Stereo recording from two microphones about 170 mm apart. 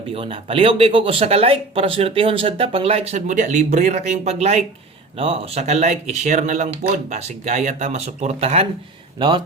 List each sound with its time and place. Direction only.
0.1 s speech: 35° right (ahead or behind)
9.1 s speech: 25° right (ahead or behind)